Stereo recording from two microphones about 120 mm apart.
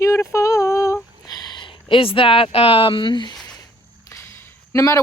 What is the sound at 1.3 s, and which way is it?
Speech, 45° left (ahead or behind).